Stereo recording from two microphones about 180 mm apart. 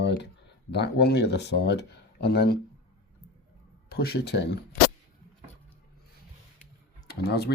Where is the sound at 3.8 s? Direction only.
60° left (ahead or behind).